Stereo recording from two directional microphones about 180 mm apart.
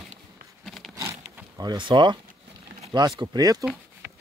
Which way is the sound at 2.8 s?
25° right (ahead or behind).